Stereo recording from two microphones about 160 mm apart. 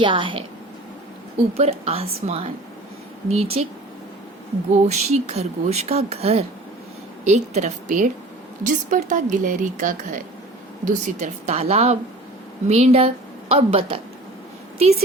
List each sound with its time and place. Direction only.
0.0 s a woman's voice: 30° right (ahead or behind)
1.5 s a woman's voice: 40° right (ahead or behind)
4.7 s speech: 45° right (ahead or behind)
10.8 s a woman's voice: 45° right (ahead or behind)